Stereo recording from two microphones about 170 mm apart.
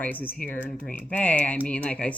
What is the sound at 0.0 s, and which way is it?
Speech, 10° left (ahead or behind).